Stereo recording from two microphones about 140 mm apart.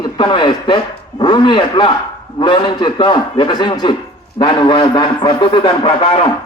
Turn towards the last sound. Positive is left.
turn(degrees=40)  # may be behind; listen again after turning